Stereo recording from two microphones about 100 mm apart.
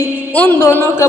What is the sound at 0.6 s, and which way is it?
Speech, 25° left (ahead or behind).